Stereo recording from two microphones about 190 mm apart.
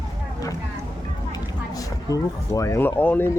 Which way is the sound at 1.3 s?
20° left (ahead or behind).